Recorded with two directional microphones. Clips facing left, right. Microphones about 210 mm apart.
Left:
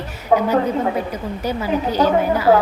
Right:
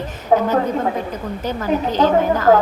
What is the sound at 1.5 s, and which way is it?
A woman's voice, 10° left (ahead or behind).